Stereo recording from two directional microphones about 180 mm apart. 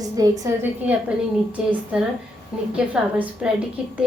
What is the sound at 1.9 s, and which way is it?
A woman's voice, 5° right (ahead or behind).